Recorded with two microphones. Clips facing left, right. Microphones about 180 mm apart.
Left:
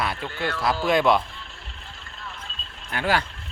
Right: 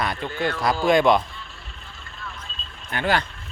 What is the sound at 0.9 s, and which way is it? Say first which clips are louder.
Speech: right 3 dB; 5° left (ahead or behind).